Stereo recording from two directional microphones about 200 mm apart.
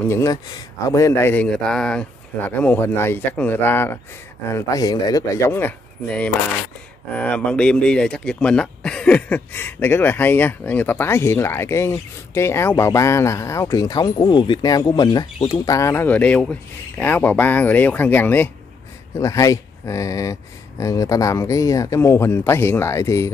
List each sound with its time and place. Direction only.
0.0 s speech: 15° left (ahead or behind)